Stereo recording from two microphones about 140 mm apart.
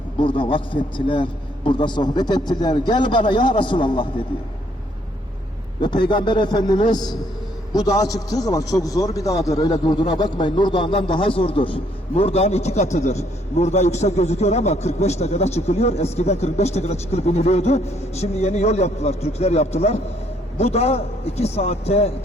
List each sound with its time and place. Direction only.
0.2 s a man's voice: 35° left (ahead or behind)
5.8 s a man's voice: 35° left (ahead or behind)